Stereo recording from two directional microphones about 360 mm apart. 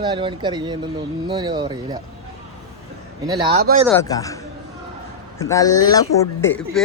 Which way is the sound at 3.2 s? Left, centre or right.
Centre.